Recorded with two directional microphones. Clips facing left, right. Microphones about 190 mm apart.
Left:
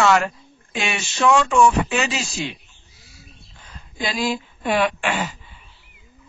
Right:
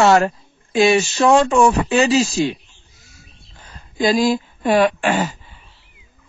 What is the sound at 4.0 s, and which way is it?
Speech, 40° right (ahead or behind).